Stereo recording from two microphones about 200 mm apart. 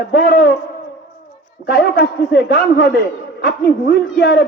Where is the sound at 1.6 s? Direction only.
55° left (ahead or behind).